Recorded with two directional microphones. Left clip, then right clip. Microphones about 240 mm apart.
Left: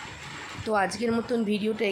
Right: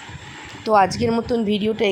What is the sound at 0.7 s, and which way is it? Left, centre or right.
A woman's voice, centre.